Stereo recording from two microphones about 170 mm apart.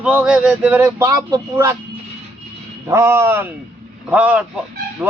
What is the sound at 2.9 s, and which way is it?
Speech, 15° right (ahead or behind).